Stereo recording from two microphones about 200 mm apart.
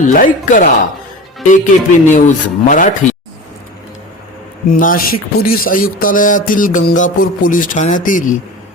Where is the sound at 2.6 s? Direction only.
40° left (ahead or behind).